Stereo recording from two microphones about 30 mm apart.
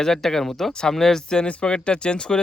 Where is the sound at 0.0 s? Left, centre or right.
Centre.